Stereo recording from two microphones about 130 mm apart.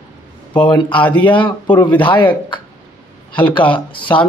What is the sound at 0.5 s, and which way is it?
Speech, 35° left (ahead or behind).